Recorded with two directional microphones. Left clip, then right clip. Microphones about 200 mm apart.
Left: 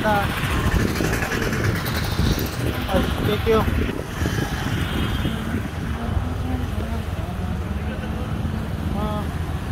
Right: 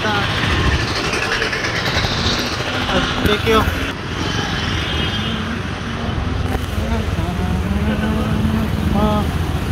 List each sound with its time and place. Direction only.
3.5 s speech: 35° left (ahead or behind)